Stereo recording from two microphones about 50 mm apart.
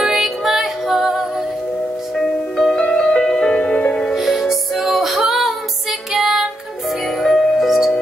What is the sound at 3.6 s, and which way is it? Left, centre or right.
Music, left.